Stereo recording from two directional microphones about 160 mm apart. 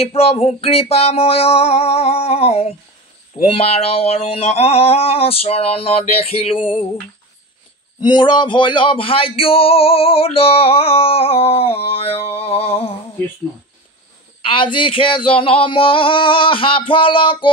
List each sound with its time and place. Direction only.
0.0 s speech: 40° left (ahead or behind)
8.0 s speech: 30° left (ahead or behind)
14.4 s speech: 30° left (ahead or behind)